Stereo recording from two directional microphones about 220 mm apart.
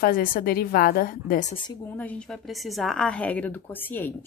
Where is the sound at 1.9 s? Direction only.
5° left (ahead or behind).